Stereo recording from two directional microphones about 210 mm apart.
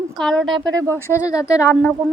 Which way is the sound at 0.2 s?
Centre (ahead or behind).